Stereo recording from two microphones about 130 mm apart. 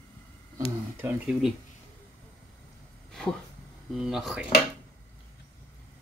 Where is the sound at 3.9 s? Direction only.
5° right (ahead or behind).